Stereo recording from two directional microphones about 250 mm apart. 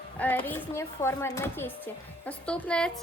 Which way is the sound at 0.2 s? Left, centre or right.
Centre.